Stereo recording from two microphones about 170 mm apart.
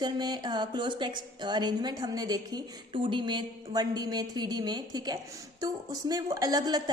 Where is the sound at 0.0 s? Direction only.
25° right (ahead or behind).